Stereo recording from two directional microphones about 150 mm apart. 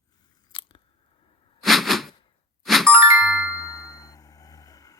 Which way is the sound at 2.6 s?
Centre (ahead or behind).